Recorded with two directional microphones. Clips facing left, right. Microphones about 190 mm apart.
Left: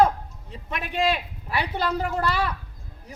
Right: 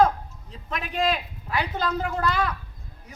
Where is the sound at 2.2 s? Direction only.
30° left (ahead or behind).